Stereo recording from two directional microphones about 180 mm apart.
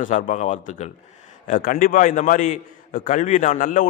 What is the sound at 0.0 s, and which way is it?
A man's voice, 45° left (ahead or behind).